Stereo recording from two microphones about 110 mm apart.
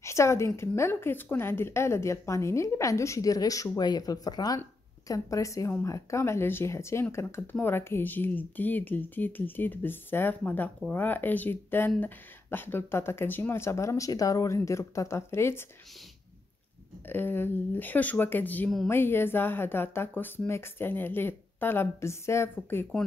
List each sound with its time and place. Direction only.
0.0 s speech: 25° left (ahead or behind)
17.1 s speech: 20° left (ahead or behind)